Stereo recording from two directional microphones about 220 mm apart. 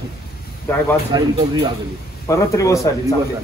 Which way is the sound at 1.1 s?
20° right (ahead or behind).